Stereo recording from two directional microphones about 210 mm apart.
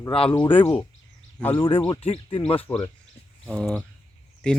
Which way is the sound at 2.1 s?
25° left (ahead or behind).